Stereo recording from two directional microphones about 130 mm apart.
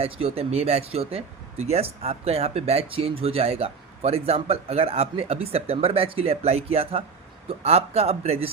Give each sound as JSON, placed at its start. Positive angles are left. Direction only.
{"t": 0.0, "sound": "speech", "side_deg": -50}